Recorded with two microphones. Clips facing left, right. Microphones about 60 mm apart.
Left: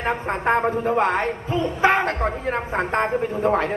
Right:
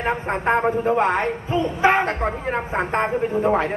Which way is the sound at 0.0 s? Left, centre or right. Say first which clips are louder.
Right 1 dB; centre.